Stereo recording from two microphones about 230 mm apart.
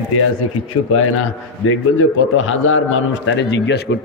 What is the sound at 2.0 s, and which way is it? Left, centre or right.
A man's voice, left.